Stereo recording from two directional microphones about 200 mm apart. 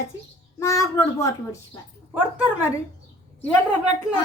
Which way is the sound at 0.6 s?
15° left (ahead or behind).